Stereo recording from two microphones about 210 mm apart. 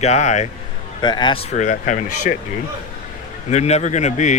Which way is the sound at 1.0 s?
20° left (ahead or behind).